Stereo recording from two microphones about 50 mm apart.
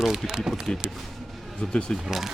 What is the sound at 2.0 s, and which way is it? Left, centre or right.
Speech, centre.